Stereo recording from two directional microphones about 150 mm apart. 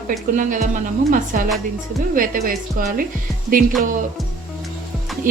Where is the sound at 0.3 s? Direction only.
60° right (ahead or behind).